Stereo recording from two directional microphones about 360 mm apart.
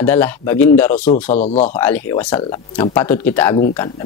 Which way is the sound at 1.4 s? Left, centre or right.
Centre.